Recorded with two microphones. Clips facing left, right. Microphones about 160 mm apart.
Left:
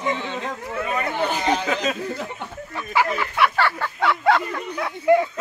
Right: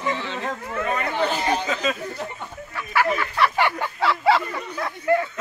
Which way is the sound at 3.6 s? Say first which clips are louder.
Even; 15° right (ahead or behind).